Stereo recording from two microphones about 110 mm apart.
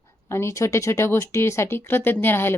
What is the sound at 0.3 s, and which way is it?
A woman's voice, 25° left (ahead or behind).